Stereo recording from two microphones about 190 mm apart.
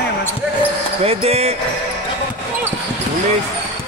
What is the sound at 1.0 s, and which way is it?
Speech, 30° right (ahead or behind).